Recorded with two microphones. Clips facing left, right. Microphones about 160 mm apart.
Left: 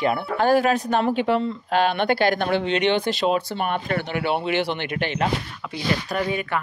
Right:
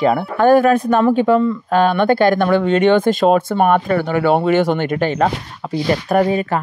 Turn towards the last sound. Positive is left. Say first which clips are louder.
# right 10 dB
turn(degrees=-35)  # may be behind; listen again after turning